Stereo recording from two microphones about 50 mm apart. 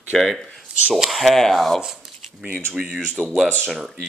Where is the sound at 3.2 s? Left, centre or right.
Right.